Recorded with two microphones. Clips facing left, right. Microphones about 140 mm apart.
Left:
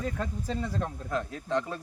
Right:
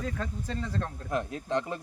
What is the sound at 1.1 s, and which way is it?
Speech, 20° right (ahead or behind).